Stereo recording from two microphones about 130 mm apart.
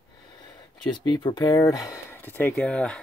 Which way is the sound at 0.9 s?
35° left (ahead or behind).